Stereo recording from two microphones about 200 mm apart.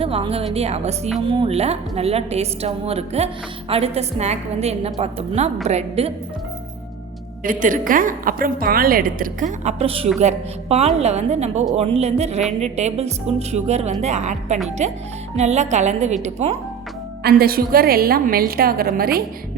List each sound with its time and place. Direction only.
0.0 s a woman's voice: 30° right (ahead or behind)
7.4 s a woman's voice: 40° right (ahead or behind)
17.2 s a woman's voice: 50° right (ahead or behind)